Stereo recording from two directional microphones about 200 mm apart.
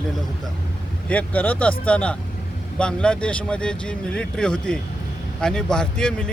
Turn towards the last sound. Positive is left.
turn(degrees=5)  # may be behind; listen again after turning